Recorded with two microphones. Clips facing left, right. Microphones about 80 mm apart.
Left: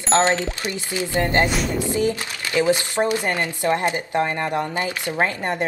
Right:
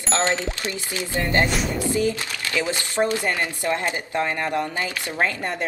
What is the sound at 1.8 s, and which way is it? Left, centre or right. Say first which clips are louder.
Speech: even; left.